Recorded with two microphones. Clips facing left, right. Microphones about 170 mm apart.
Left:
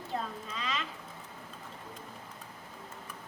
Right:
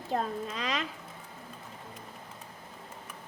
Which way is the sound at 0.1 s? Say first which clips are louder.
Right 6 dB; 45° right (ahead or behind).